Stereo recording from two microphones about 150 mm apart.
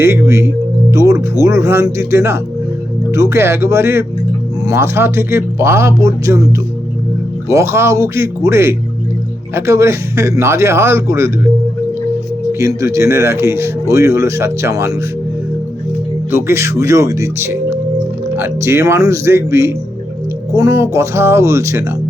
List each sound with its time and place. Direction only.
0.0 s speech: 15° right (ahead or behind)
12.5 s speech: 20° right (ahead or behind)
16.3 s speech: 20° right (ahead or behind)